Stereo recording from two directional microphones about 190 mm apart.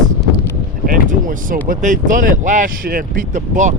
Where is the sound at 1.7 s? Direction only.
45° right (ahead or behind).